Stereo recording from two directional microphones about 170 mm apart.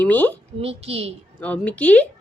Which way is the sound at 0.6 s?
35° right (ahead or behind).